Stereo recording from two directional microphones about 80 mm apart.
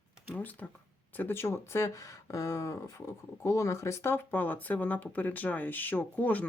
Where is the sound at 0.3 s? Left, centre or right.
Centre.